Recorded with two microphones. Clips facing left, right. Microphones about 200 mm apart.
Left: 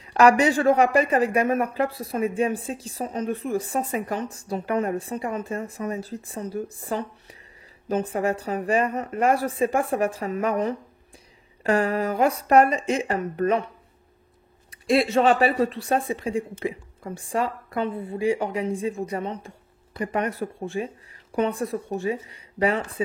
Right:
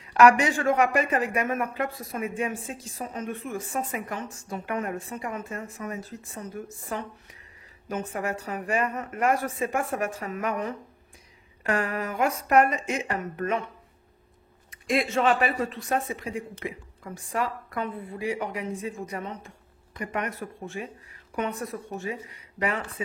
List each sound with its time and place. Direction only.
0.1 s speech: 35° left (ahead or behind)
14.7 s speech: 35° left (ahead or behind)